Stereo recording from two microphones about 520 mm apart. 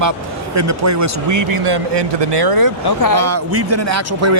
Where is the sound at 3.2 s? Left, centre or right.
Right.